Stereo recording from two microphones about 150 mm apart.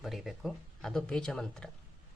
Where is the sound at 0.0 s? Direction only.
Centre (ahead or behind).